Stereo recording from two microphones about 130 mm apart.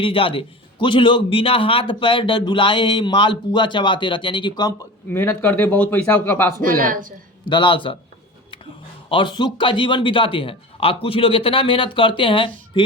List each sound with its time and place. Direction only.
0.0 s a man's voice: 45° left (ahead or behind)
5.0 s a man's voice: 15° left (ahead or behind)
6.6 s speech: 90° right
7.5 s a man's voice: 40° left (ahead or behind)
9.0 s a man's voice: 40° left (ahead or behind)